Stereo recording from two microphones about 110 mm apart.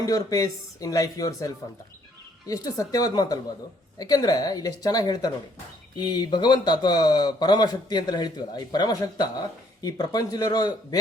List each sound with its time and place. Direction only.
0.0 s speech: 30° left (ahead or behind)